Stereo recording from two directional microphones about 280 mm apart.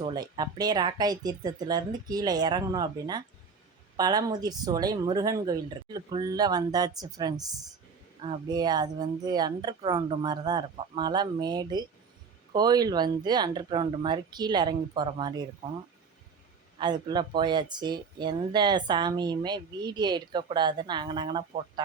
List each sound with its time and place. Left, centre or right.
0.0 s speech: centre
16.8 s speech: centre